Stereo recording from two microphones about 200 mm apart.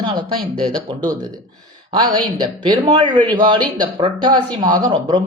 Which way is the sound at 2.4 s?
20° right (ahead or behind).